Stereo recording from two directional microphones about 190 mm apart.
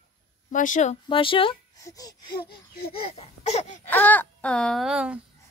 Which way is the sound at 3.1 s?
35° left (ahead or behind).